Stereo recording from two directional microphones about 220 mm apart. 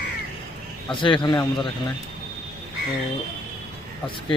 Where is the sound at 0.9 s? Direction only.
20° left (ahead or behind).